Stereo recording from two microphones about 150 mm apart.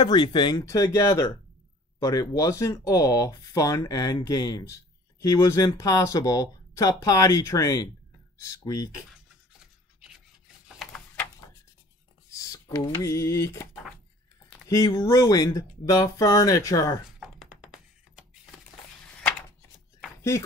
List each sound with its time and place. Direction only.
0.0 s speech: 30° left (ahead or behind)
12.3 s speech: 25° left (ahead or behind)
14.7 s speech: 25° left (ahead or behind)